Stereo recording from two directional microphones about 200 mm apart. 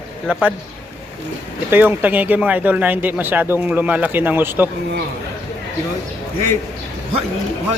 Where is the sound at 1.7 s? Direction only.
10° right (ahead or behind).